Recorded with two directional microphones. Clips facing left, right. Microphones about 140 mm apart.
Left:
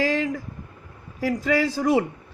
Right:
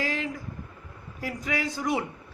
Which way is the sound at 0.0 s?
90° left.